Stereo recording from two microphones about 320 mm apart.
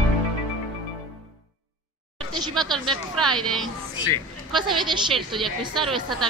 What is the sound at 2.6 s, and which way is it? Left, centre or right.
Speech, centre.